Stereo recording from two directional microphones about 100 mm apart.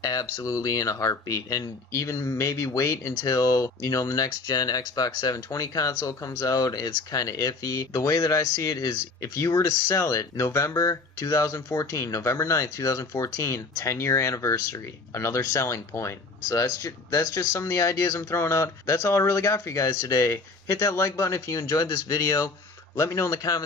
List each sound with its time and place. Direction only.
0.0 s speech: 35° left (ahead or behind)